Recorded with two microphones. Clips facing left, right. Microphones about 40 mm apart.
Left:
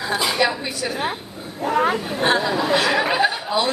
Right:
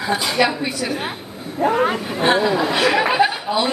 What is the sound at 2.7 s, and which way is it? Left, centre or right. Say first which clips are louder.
Speech: left 2 dB; right.